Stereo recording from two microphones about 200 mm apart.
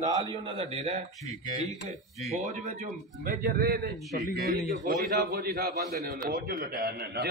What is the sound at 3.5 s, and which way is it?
A man's voice, 50° right (ahead or behind).